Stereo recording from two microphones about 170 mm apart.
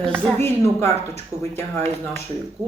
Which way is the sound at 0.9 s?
40° right (ahead or behind).